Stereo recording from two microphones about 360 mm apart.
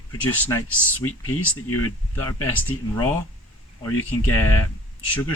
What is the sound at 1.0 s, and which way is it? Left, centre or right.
Speech, left.